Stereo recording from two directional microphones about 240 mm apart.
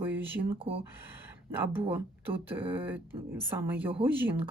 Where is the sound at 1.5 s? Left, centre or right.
Centre.